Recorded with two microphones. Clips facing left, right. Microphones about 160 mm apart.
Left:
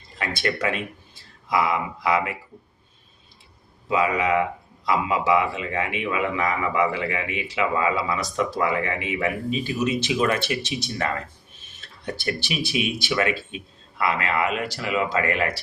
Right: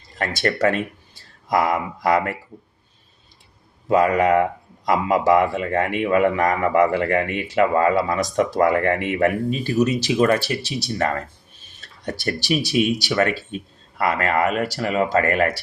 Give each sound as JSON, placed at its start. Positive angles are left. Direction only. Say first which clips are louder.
{"t": 0.2, "sound": "speech", "louder": "right 5 dB", "side_deg": -45}
{"t": 3.8, "sound": "speech", "louder": "right 5 dB", "side_deg": -45}
{"t": 9.7, "sound": "speech", "louder": "right 6 dB", "side_deg": -40}